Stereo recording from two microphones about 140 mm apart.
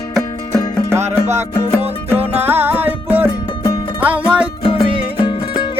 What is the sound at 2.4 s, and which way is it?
Music, 15° right (ahead or behind).